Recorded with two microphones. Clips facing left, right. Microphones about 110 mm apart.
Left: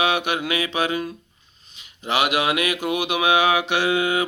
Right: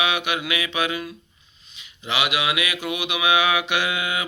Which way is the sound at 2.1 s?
40° left (ahead or behind).